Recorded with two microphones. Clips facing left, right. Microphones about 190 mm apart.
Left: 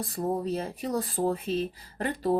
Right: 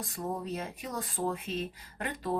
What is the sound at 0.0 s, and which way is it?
Speech, 35° left (ahead or behind).